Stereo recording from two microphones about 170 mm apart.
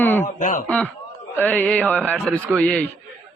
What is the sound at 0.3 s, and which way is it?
Speech, 50° left (ahead or behind).